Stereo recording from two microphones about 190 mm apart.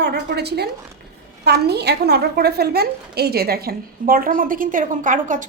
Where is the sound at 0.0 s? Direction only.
60° right (ahead or behind).